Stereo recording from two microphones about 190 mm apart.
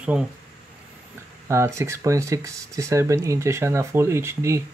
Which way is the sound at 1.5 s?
15° right (ahead or behind).